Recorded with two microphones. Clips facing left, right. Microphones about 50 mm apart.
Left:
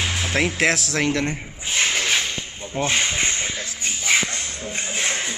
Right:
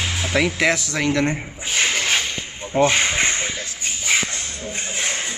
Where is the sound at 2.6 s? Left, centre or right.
Centre.